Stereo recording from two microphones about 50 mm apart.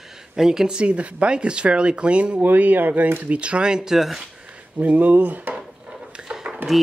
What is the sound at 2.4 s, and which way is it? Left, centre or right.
Speech, right.